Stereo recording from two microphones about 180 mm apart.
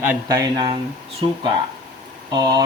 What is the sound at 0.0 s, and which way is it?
Speech, 15° right (ahead or behind).